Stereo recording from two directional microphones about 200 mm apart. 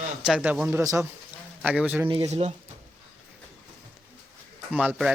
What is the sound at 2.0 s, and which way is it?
Speech, 25° right (ahead or behind).